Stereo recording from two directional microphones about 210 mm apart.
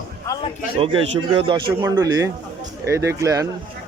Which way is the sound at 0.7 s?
25° right (ahead or behind).